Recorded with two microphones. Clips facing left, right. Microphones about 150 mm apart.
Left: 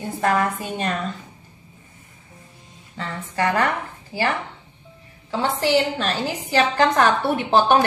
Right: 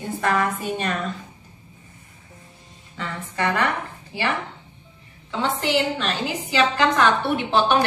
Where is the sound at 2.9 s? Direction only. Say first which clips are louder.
Left 2 dB; 35° left (ahead or behind).